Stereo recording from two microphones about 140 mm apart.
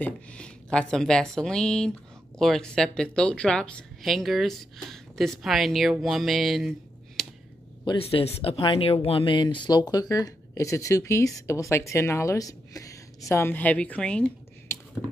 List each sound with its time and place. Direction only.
0.0 s speech: 5° left (ahead or behind)
7.2 s a sound: 5° left (ahead or behind)
7.8 s a woman's voice: 40° left (ahead or behind); by 14.8 s 10° left (ahead or behind)